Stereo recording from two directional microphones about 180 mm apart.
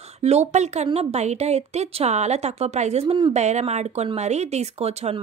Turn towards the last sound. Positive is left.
turn(degrees=-35)  # may be behind; listen again after turning